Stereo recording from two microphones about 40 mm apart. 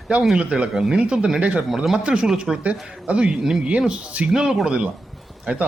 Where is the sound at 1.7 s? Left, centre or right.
Centre.